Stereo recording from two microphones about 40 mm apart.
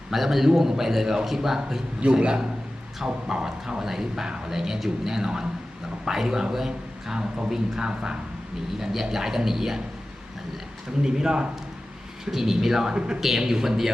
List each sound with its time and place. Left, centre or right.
0.1 s a man's voice: centre
2.1 s a man's voice: centre
11.0 s a man's voice: centre
13.1 s a man's voice: centre